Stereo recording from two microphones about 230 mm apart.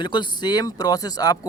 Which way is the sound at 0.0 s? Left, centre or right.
Centre.